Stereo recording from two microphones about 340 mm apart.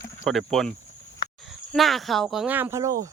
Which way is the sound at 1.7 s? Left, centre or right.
Centre.